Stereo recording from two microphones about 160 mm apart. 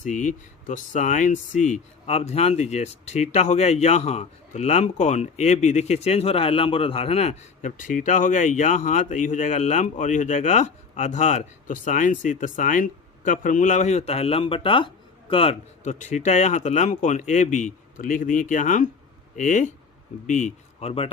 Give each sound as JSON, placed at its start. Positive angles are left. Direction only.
{"t": 0.0, "sound": "speech", "side_deg": 50}
{"t": 15.8, "sound": "speech", "side_deg": 50}